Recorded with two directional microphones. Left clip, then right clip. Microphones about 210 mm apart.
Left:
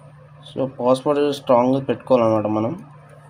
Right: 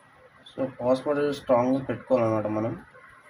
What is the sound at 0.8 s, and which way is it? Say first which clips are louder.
Speech: left 7 dB; 50° left (ahead or behind).